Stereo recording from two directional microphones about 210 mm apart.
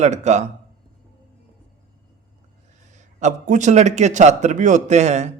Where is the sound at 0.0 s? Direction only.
35° right (ahead or behind).